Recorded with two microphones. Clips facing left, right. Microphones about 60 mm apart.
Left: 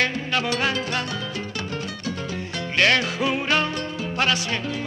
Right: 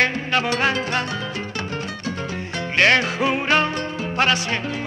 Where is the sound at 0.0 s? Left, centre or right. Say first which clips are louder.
Right 3 dB; right.